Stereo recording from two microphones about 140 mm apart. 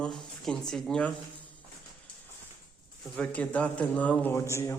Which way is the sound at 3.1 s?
10° left (ahead or behind).